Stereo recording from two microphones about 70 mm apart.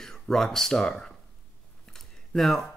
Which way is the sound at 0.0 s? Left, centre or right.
Centre.